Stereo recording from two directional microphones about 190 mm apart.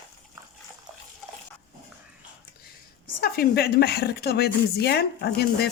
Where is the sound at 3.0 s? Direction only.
55° left (ahead or behind).